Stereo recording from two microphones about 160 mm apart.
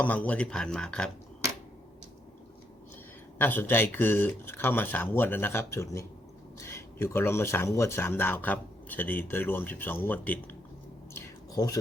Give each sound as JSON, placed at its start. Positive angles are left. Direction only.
{"t": 0.0, "sound": "speech", "side_deg": 10}
{"t": 3.3, "sound": "speech", "side_deg": 10}
{"t": 11.1, "sound": "a sound", "side_deg": 20}